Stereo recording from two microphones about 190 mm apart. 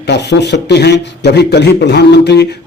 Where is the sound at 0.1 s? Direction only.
65° left (ahead or behind).